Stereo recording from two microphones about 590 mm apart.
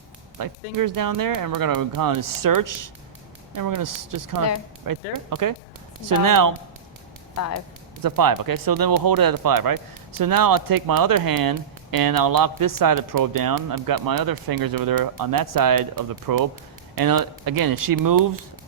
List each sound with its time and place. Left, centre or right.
0.3 s speech: right
8.0 s speech: right